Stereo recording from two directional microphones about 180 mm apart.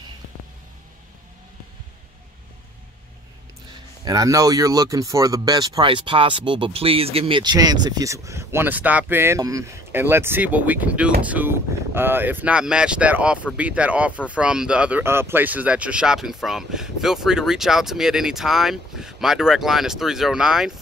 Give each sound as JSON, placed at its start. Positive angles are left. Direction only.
{"t": 4.0, "sound": "speech", "side_deg": -20}